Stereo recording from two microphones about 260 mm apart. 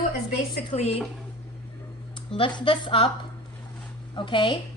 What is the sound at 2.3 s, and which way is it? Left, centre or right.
Speech, centre.